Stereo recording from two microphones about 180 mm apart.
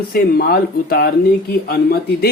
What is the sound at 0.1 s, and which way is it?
Speech, 55° left (ahead or behind).